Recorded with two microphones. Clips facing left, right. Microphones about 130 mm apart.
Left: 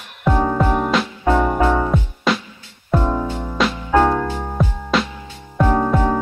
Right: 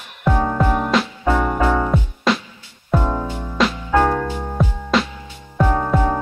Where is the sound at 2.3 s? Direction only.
Centre (ahead or behind).